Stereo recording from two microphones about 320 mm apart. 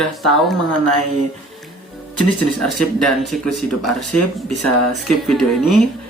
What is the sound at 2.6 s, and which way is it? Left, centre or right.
Speech, centre.